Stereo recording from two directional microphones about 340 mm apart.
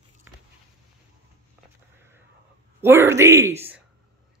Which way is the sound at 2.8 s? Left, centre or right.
Centre.